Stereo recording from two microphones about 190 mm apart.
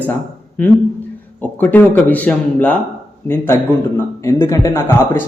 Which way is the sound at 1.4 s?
10° left (ahead or behind).